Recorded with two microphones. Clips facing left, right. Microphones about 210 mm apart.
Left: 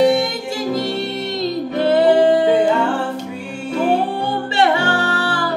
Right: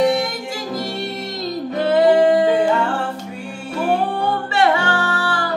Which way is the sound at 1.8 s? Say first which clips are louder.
Left 1 dB; 30° left (ahead or behind).